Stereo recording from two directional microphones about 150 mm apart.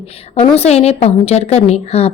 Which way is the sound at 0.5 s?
45° left (ahead or behind).